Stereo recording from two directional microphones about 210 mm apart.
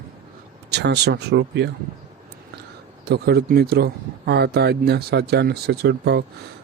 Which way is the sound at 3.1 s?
50° right (ahead or behind).